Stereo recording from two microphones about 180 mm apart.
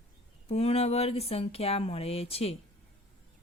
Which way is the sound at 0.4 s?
35° left (ahead or behind).